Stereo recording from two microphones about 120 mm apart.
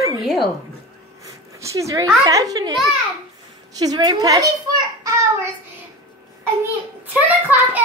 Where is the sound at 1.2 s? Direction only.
25° right (ahead or behind).